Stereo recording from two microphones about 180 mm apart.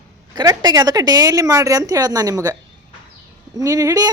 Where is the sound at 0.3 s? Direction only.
20° right (ahead or behind).